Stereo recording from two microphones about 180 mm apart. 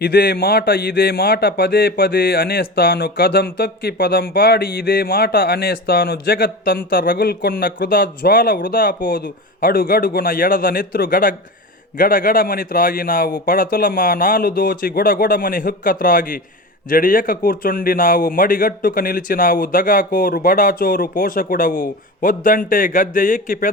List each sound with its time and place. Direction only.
0.0 s a man's voice: 60° left (ahead or behind)